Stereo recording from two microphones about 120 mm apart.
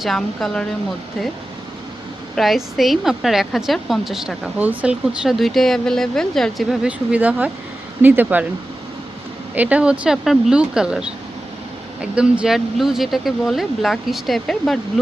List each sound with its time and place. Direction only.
0.0 s speech: centre (ahead or behind)
2.3 s speech: centre (ahead or behind)
6.8 s a woman's voice: 10° right (ahead or behind)
9.6 s a woman's voice: 10° right (ahead or behind)